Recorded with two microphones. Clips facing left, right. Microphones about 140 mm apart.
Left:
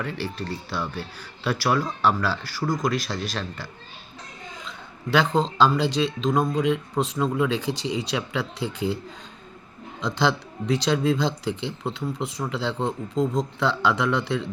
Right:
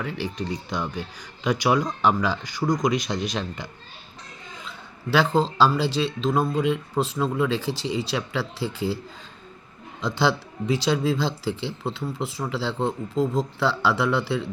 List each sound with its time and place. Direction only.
0.0 s speech: 10° right (ahead or behind)
5.1 s speech: 5° right (ahead or behind)
10.0 s speech: 5° right (ahead or behind)